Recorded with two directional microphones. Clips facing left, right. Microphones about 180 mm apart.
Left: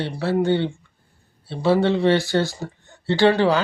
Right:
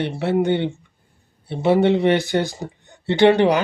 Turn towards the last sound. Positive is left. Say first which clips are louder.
# right 2 dB
turn(degrees=-20)  # may be behind; listen again after turning